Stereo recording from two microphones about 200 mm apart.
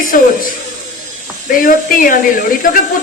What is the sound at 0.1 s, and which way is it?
Speech, 45° left (ahead or behind).